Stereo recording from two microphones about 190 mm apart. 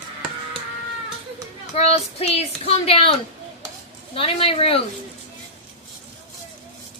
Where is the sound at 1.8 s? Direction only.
35° left (ahead or behind).